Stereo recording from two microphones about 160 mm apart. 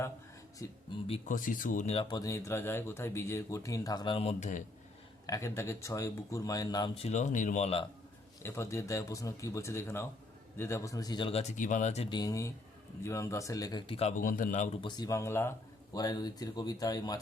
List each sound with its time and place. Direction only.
0.6 s speech: 20° left (ahead or behind)
1.3 s speech: 55° left (ahead or behind)
2.0 s speech: 25° left (ahead or behind); by 4.6 s 50° left (ahead or behind)
5.2 s speech: 20° left (ahead or behind)
7.0 s speech: 45° left (ahead or behind)
8.4 s speech: 20° left (ahead or behind); by 12.0 s 45° left (ahead or behind)
12.0 s speech: 25° left (ahead or behind)
14.2 s speech: 60° left (ahead or behind)
14.8 s speech: 25° left (ahead or behind)